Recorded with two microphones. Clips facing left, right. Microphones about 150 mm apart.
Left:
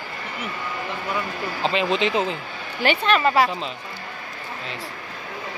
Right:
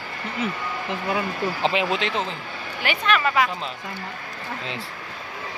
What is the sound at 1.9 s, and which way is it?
Speech, 5° left (ahead or behind).